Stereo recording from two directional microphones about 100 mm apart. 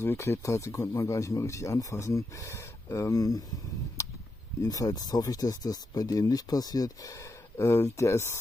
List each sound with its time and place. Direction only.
0.0 s speech: 25° left (ahead or behind)
4.6 s speech: 40° left (ahead or behind)